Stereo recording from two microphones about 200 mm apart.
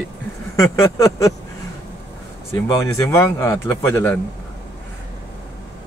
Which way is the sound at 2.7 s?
15° left (ahead or behind).